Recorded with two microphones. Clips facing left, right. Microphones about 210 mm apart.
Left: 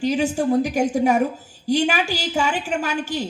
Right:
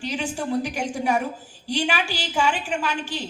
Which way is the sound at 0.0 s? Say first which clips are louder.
Left 8 dB; 45° left (ahead or behind).